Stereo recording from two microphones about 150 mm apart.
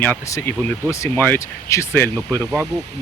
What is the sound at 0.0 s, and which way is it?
Speech, 15° left (ahead or behind).